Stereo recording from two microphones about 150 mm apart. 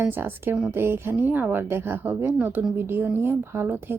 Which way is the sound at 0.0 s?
15° right (ahead or behind).